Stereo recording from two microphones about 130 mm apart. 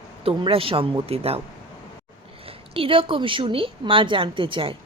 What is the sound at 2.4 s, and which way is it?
A woman's voice, 45° right (ahead or behind).